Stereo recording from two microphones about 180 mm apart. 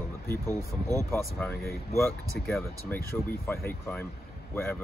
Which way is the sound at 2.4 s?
65° left (ahead or behind).